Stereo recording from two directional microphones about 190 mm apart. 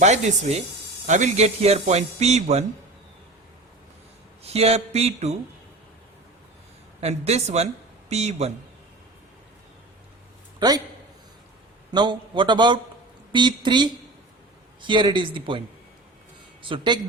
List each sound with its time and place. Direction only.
0.0 s speech: 35° right (ahead or behind)
4.4 s speech: 35° right (ahead or behind)
7.0 s speech: 35° right (ahead or behind)
11.9 s a man's voice: 25° right (ahead or behind)
16.6 s a man's voice: 25° right (ahead or behind)